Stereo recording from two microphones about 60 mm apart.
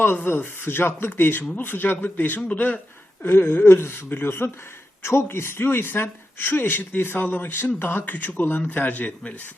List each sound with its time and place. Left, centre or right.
0.3 s speech: left
3.2 s speech: left